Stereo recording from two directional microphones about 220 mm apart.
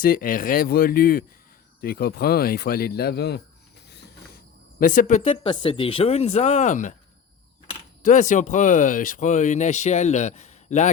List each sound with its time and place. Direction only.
0.0 s speech: 40° left (ahead or behind)
3.8 s mechanisms: 50° left (ahead or behind)
4.8 s speech: 35° left (ahead or behind)
8.0 s speech: 35° left (ahead or behind)